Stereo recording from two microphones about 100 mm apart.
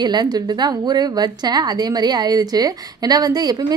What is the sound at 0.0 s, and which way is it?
A woman's voice, 45° right (ahead or behind).